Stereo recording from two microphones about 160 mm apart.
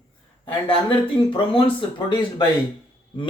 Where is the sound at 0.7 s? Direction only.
30° left (ahead or behind).